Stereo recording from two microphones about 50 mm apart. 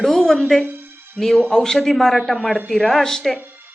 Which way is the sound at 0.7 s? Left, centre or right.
Right.